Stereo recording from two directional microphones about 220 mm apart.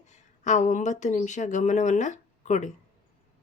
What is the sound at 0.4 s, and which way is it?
Speech, 35° left (ahead or behind).